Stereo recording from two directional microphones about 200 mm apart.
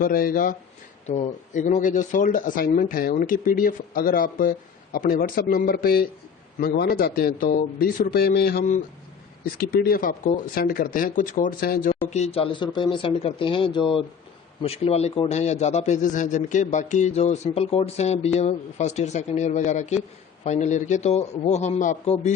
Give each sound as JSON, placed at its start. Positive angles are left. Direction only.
{"t": 0.0, "sound": "a man's voice", "side_deg": 45}